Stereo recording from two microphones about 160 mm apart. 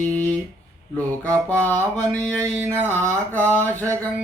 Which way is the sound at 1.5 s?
10° left (ahead or behind).